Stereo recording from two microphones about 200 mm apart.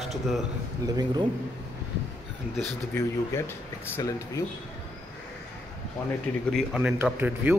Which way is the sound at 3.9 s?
15° left (ahead or behind).